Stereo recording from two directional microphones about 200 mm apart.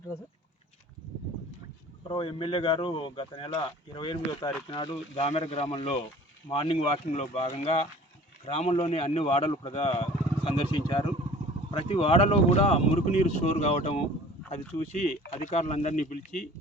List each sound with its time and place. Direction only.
2.0 s speech: 25° left (ahead or behind)
15.3 s speech: 35° left (ahead or behind)